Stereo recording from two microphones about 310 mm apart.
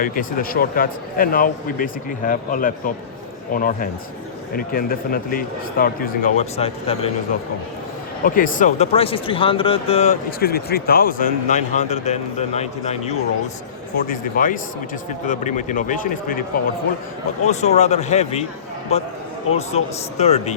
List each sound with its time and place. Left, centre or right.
0.0 s speech: left
8.2 s speech: left
17.4 s speech: left